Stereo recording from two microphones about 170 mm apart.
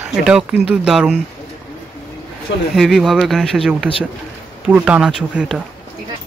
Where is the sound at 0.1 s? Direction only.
5° right (ahead or behind).